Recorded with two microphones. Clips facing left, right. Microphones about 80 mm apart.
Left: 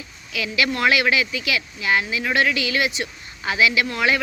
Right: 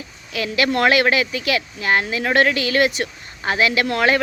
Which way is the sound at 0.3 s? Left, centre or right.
Right.